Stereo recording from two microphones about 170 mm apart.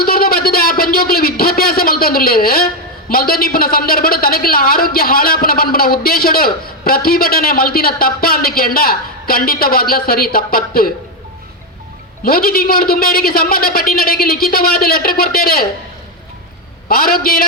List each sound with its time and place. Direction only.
0.0 s a sound: 60° left (ahead or behind)
3.1 s a woman's voice: 60° left (ahead or behind)
12.2 s a woman's voice: 60° left (ahead or behind)
16.9 s a woman's voice: 60° left (ahead or behind)